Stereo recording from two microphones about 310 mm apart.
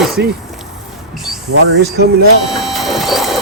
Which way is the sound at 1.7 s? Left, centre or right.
Right.